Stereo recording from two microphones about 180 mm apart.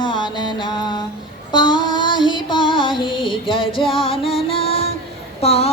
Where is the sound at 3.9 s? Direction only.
30° left (ahead or behind).